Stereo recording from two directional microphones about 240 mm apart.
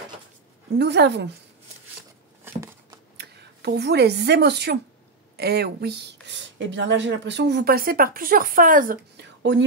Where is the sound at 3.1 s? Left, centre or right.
Right.